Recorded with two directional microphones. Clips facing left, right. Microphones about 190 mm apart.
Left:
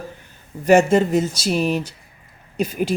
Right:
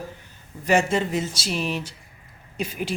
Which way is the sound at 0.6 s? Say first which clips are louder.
Left 7 dB; 45° left (ahead or behind).